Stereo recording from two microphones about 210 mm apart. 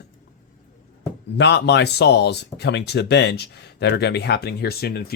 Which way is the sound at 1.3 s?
55° left (ahead or behind).